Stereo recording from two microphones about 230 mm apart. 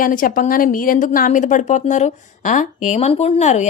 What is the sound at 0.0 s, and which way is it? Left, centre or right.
A woman's voice, left.